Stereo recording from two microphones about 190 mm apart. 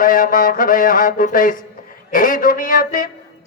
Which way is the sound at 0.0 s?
45° left (ahead or behind).